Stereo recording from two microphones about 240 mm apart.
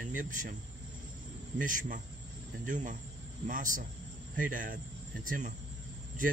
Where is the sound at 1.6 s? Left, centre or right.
Right.